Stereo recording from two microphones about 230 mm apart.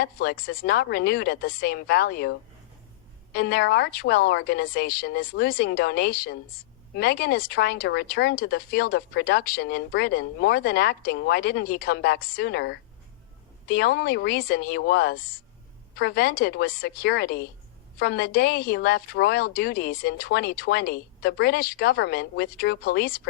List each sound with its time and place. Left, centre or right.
0.0 s speech: left
3.3 s speech: left